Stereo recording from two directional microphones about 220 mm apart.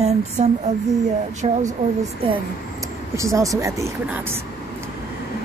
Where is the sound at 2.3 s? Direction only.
15° right (ahead or behind).